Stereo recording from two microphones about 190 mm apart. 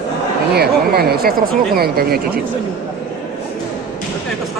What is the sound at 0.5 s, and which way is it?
Speech, 55° right (ahead or behind).